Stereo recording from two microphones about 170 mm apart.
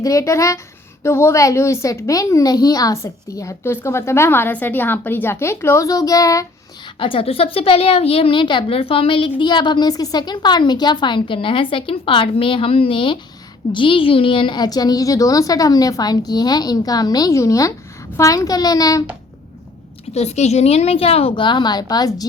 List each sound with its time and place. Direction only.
0.0 s a woman's voice: 20° left (ahead or behind)
7.0 s a woman's voice: 30° left (ahead or behind)
20.1 s a woman's voice: 40° left (ahead or behind); by 22.3 s 20° left (ahead or behind)